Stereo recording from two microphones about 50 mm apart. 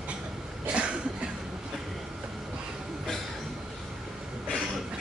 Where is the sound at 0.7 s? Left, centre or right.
Right.